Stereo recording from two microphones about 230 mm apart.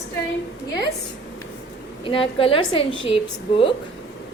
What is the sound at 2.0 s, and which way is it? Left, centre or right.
A woman's voice, left.